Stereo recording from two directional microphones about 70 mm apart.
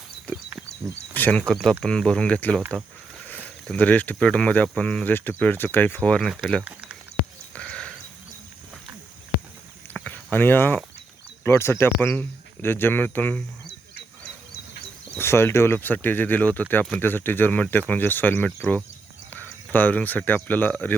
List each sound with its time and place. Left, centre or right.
1.1 s speech: left
5.1 s speech: left
6.2 s speech: centre
7.5 s a sound: centre
9.9 s a sound: left
10.3 s speech: left
15.2 s speech: left
18.4 s speech: centre
19.3 s speech: left